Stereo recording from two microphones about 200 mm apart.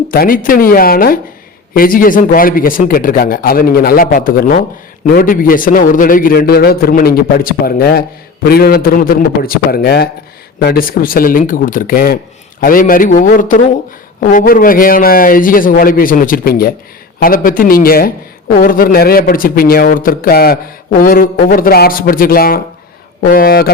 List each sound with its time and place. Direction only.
0.1 s a man's voice: 45° left (ahead or behind)